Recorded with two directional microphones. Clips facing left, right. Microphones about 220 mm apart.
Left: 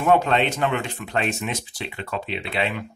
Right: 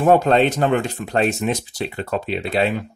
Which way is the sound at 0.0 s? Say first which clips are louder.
Right 5 dB; 40° right (ahead or behind).